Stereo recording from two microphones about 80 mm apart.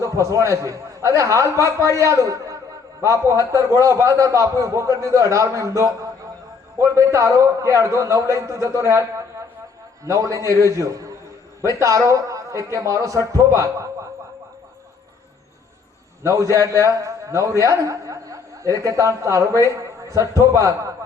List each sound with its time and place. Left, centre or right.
0.0 s a man's voice: right
16.2 s a man's voice: right